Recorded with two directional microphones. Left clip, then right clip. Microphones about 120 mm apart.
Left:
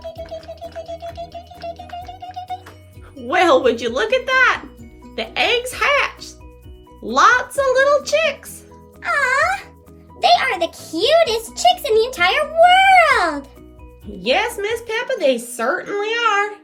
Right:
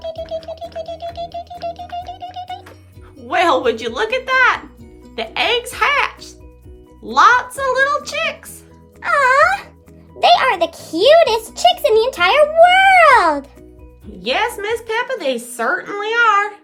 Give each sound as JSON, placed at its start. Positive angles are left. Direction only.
{"t": 0.9, "sound": "music", "side_deg": -40}
{"t": 3.2, "sound": "a child's voice", "side_deg": 0}
{"t": 9.0, "sound": "music", "side_deg": -35}
{"t": 10.2, "sound": "a child's voice", "side_deg": -35}
{"t": 14.2, "sound": "a child's voice", "side_deg": -10}